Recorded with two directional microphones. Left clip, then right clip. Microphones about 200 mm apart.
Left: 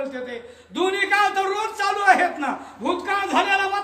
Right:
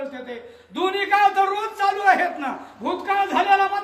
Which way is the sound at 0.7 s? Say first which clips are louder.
Even; 10° left (ahead or behind).